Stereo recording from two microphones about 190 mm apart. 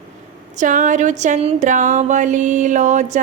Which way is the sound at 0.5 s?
40° right (ahead or behind).